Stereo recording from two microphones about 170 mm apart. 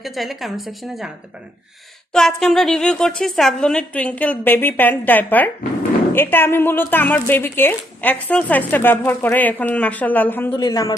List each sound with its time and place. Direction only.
0.0 s a woman's voice: centre (ahead or behind)
2.1 s a woman's voice: centre (ahead or behind)
10.6 s speech: 25° left (ahead or behind)